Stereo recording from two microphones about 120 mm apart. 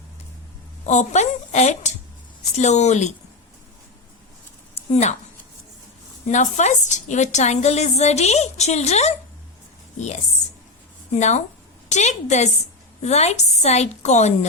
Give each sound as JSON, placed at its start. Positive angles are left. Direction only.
{"t": 0.9, "sound": "a woman's voice", "side_deg": 75}
{"t": 4.7, "sound": "a sound", "side_deg": 75}
{"t": 6.2, "sound": "a woman's voice", "side_deg": 90}
{"t": 11.1, "sound": "a woman's voice", "side_deg": 70}